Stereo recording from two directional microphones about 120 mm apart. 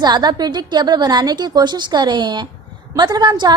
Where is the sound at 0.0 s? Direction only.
35° right (ahead or behind).